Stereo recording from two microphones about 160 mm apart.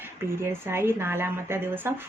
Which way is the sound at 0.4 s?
15° right (ahead or behind).